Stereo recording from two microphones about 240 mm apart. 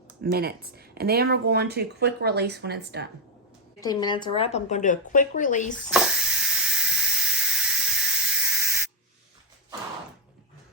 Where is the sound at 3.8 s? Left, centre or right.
Centre; by 5.7 s left.